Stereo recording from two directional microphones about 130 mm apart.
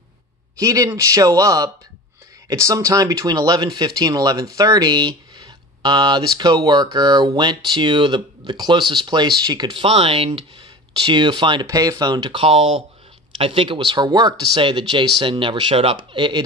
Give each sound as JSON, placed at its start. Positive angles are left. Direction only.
{"t": 0.6, "sound": "speech", "side_deg": -25}
{"t": 11.6, "sound": "speech", "side_deg": -25}